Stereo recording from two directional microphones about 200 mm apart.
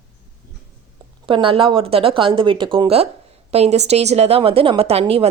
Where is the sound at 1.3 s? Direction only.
25° right (ahead or behind).